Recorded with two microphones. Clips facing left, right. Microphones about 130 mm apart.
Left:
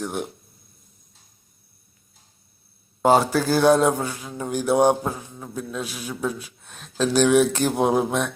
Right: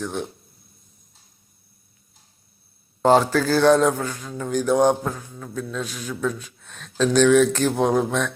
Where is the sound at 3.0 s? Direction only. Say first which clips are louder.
Right 1 dB; 10° left (ahead or behind).